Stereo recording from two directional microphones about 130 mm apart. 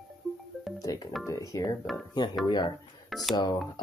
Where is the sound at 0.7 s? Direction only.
25° left (ahead or behind).